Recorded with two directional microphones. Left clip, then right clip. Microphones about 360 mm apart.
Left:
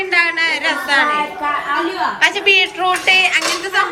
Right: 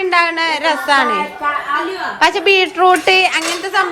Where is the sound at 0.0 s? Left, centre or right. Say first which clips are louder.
Right 1 dB; centre.